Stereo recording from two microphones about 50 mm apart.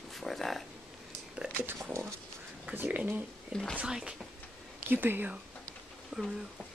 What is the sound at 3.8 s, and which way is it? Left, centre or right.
Speech, centre.